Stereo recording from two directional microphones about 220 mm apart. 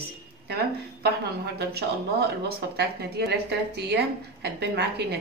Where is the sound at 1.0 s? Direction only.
45° right (ahead or behind).